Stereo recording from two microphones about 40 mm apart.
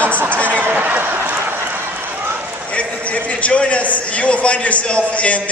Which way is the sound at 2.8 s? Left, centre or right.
Left.